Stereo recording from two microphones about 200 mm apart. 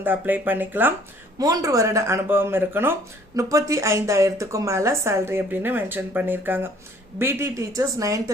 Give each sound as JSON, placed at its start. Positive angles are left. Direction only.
{"t": 0.0, "sound": "a woman's voice", "side_deg": -10}